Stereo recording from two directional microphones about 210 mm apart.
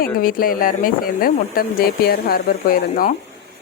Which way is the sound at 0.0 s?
40° left (ahead or behind).